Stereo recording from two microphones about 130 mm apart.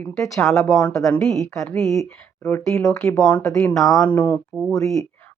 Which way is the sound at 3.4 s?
25° left (ahead or behind).